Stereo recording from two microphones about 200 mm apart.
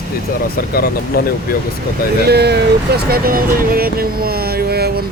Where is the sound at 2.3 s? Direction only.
55° right (ahead or behind).